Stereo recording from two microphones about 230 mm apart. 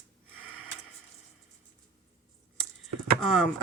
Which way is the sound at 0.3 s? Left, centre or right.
Right.